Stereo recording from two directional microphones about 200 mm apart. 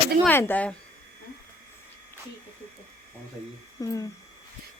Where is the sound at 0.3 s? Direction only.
10° left (ahead or behind).